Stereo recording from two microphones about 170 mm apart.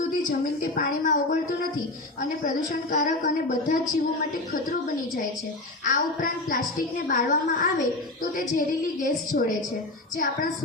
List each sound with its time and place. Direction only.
0.3 s a woman's voice: 55° left (ahead or behind)
5.8 s a woman's voice: 50° left (ahead or behind)